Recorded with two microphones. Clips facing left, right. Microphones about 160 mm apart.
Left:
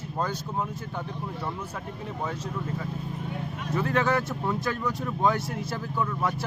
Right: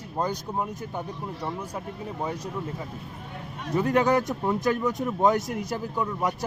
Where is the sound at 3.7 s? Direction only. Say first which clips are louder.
Right 4 dB; 15° right (ahead or behind).